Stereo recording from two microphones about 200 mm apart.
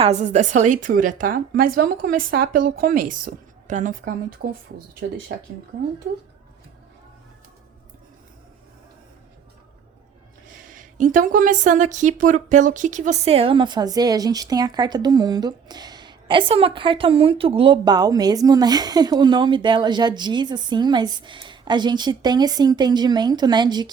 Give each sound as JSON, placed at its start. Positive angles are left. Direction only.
{"t": 0.0, "sound": "a woman's voice", "side_deg": -35}
{"t": 10.6, "sound": "speech", "side_deg": -40}